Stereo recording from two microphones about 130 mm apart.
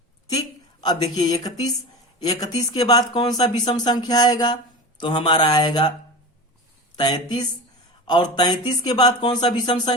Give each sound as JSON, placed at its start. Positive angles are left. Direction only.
{"t": 0.3, "sound": "a woman's voice", "side_deg": 30}
{"t": 6.9, "sound": "speech", "side_deg": 35}